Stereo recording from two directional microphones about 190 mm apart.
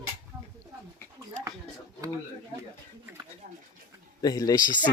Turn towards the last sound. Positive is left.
turn(degrees=20)  # may be behind; listen again after turning